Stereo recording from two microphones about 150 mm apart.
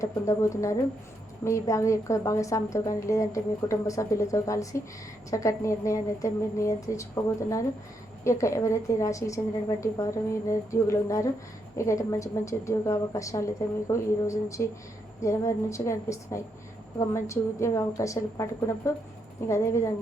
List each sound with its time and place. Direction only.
0.0 s a woman's voice: 20° left (ahead or behind)